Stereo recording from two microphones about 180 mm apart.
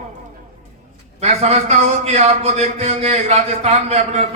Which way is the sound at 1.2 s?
35° right (ahead or behind).